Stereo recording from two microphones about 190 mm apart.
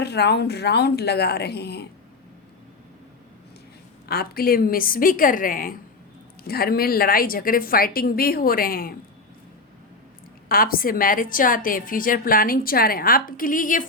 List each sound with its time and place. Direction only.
0.0 s a woman's voice: 60° left (ahead or behind)
4.1 s a woman's voice: 55° left (ahead or behind)
10.5 s a woman's voice: 50° left (ahead or behind)